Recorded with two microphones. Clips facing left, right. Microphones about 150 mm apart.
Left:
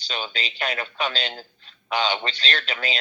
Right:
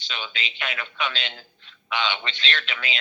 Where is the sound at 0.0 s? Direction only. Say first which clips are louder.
Left 3 dB; 40° left (ahead or behind).